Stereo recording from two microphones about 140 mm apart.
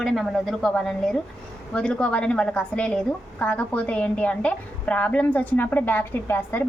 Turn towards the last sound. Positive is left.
turn(degrees=15)  # may be behind; listen again after turning